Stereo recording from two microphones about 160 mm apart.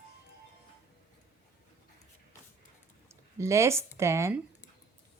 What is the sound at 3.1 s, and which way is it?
Speech, 20° right (ahead or behind).